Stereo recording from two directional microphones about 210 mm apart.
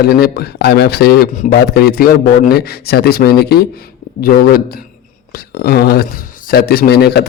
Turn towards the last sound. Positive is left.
turn(degrees=50)  # may be behind; listen again after turning